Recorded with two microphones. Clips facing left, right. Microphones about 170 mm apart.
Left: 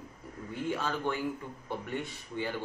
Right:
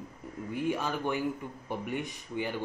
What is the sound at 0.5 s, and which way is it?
Speech, 15° right (ahead or behind).